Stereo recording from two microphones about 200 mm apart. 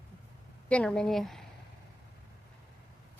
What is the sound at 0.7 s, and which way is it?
Speech, 5° left (ahead or behind).